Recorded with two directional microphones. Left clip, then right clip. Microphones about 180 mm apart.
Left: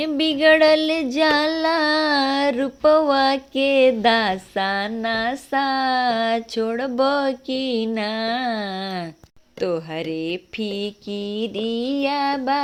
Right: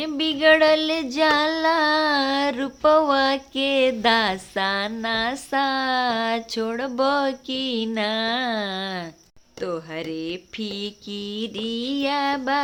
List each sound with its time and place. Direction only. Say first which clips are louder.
0.0 s child singing: left 2 dB; 20° left (ahead or behind)